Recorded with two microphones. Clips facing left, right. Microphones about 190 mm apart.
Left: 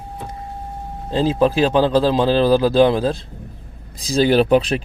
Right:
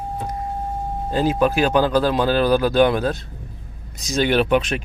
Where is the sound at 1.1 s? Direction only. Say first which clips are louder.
Left 2 dB; 30° left (ahead or behind).